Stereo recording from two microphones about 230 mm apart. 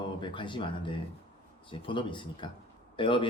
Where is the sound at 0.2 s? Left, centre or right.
Left.